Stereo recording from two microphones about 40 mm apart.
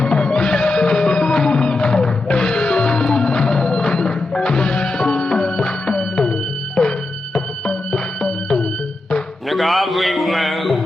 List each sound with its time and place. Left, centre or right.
0.0 s music: left
7.3 s music: centre
9.5 s a sound: centre